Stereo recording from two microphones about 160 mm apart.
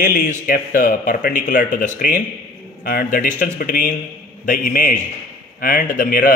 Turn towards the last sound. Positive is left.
turn(degrees=60)  # may be behind; listen again after turning